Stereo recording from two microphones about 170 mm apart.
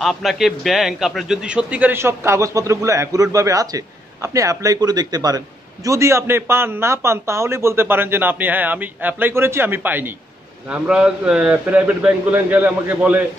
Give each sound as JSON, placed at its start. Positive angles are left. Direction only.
{"t": 0.0, "sound": "a man's voice", "side_deg": 0}